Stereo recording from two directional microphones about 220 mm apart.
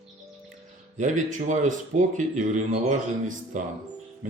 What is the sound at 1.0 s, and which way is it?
Speech, 35° right (ahead or behind).